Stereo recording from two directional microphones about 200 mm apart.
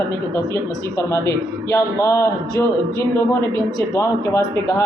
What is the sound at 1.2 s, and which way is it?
A man's voice, 15° left (ahead or behind).